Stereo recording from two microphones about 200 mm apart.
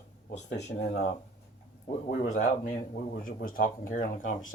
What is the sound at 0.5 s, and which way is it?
Speech, 35° left (ahead or behind).